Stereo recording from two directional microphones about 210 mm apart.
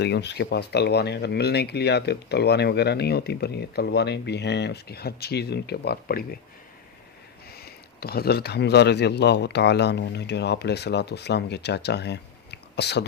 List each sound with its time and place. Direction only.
0.0 s speech: 55° left (ahead or behind)
7.6 s speech: 45° left (ahead or behind)